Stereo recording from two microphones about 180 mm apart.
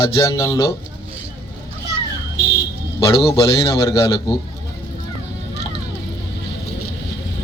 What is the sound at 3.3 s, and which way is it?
A man's voice, 15° left (ahead or behind).